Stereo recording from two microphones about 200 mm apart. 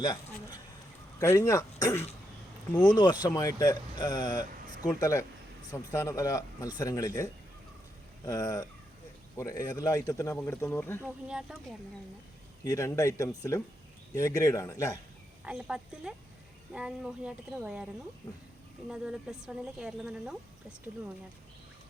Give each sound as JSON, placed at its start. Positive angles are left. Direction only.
{"t": 0.0, "sound": "a sound", "side_deg": 20}
{"t": 1.2, "sound": "speech", "side_deg": 15}
{"t": 11.0, "sound": "a woman's voice", "side_deg": -5}
{"t": 12.6, "sound": "speech", "side_deg": 15}
{"t": 15.4, "sound": "a woman's voice", "side_deg": -5}
{"t": 18.9, "sound": "a woman's voice", "side_deg": -5}